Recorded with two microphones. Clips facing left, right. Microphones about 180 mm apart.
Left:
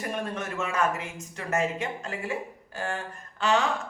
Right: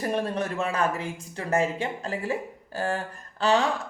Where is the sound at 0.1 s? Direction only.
35° right (ahead or behind).